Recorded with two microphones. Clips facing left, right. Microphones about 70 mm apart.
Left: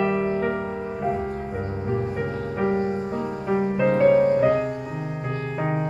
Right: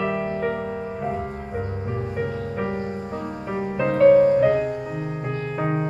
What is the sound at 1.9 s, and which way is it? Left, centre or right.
Music, centre.